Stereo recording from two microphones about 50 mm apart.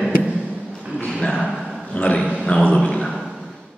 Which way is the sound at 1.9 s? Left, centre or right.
Left.